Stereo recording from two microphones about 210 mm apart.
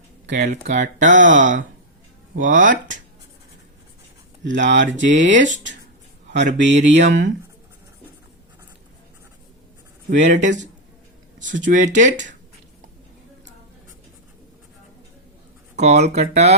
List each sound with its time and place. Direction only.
0.5 s speech: 35° right (ahead or behind)
4.4 s mantra: 60° right (ahead or behind)
6.3 s mantra: 55° right (ahead or behind)
10.1 s speech: 35° right (ahead or behind)
15.7 s speech: 30° right (ahead or behind)